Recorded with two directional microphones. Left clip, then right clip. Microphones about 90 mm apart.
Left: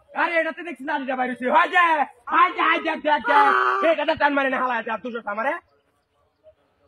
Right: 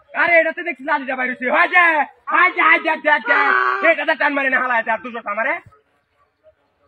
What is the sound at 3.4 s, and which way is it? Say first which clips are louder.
Speech: right 1 dB; 35° left (ahead or behind).